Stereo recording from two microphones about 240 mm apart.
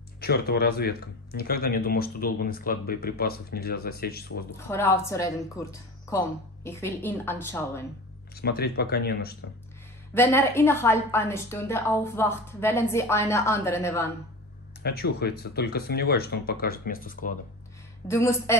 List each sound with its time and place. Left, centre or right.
0.2 s speech: left
4.6 s a woman's voice: centre
8.4 s speech: left
10.1 s a woman's voice: centre
14.8 s speech: left
18.0 s a woman's voice: centre